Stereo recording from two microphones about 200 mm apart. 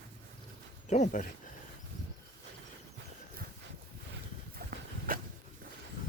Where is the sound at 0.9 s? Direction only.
35° left (ahead or behind).